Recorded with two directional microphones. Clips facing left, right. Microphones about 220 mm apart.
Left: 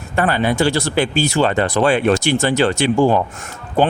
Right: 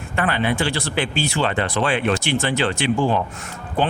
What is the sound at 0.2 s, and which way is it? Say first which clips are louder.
Speech: left 5 dB; 40° left (ahead or behind).